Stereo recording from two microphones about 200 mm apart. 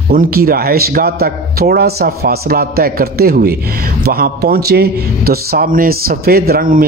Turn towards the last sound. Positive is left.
turn(degrees=-45)  # may be behind; listen again after turning